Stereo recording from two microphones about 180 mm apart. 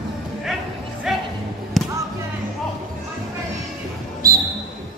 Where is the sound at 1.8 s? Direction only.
Centre (ahead or behind).